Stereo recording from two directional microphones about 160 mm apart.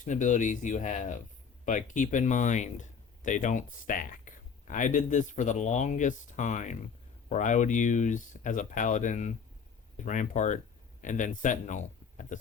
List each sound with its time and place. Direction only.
0.0 s speech: 50° left (ahead or behind)